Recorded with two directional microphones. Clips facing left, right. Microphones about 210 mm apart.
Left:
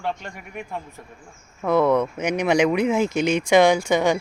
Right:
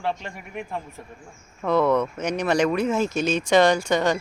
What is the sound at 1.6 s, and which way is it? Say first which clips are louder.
Speech: left 2 dB; 10° left (ahead or behind).